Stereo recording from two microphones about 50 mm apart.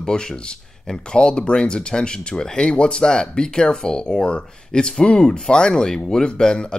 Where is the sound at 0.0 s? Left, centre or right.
Centre.